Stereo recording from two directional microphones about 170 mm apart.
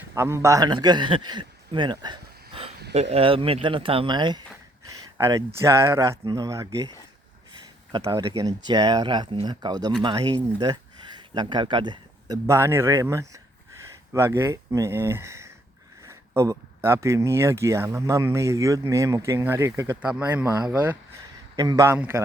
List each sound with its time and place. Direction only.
0.1 s a man's voice: 15° right (ahead or behind)
4.9 s a sound: 20° right (ahead or behind)
5.5 s speech: 15° right (ahead or behind)
7.9 s speech: 20° right (ahead or behind)
21.5 s speech: 20° right (ahead or behind)